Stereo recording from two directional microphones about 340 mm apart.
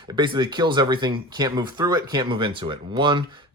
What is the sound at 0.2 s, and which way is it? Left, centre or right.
Speech, centre.